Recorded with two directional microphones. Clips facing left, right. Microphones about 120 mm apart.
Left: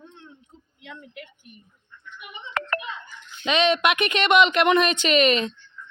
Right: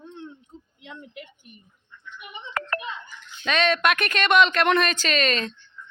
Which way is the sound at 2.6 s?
90° left.